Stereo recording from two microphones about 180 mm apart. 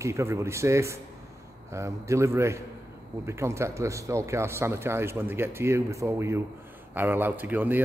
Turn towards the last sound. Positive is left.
turn(degrees=-10)  # may be behind; listen again after turning